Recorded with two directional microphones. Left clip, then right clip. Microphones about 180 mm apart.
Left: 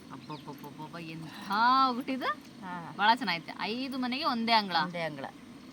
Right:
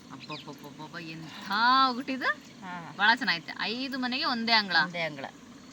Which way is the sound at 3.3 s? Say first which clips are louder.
Right 3 dB; 35° left (ahead or behind).